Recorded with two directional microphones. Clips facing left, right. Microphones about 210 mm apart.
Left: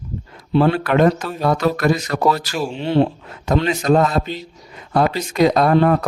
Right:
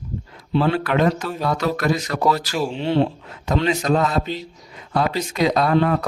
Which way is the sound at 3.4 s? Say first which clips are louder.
Left 3 dB; 50° left (ahead or behind).